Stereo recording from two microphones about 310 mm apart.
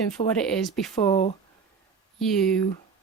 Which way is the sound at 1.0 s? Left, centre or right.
Centre.